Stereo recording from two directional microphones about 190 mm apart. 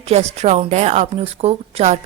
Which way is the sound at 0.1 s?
35° right (ahead or behind).